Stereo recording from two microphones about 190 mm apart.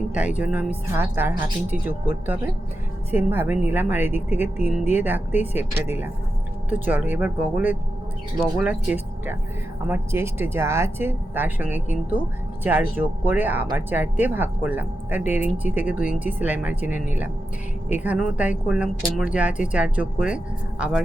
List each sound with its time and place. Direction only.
0.1 s speech: 5° right (ahead or behind)